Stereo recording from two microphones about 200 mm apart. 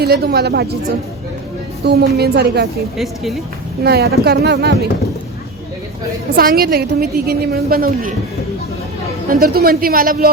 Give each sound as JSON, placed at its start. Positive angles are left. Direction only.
{"t": 0.0, "sound": "a woman's voice", "side_deg": -50}
{"t": 1.8, "sound": "a woman's voice", "side_deg": -55}
{"t": 3.0, "sound": "speech", "side_deg": 0}
{"t": 3.8, "sound": "a woman's voice", "side_deg": -50}
{"t": 6.3, "sound": "a woman's voice", "side_deg": -45}
{"t": 9.3, "sound": "a woman's voice", "side_deg": -50}